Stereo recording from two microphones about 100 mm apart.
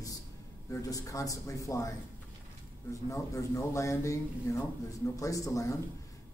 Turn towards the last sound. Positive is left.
turn(degrees=35)  # may be behind; listen again after turning